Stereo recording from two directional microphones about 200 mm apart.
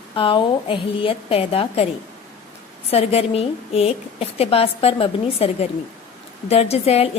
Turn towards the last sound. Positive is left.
turn(degrees=30)  # may be behind; listen again after turning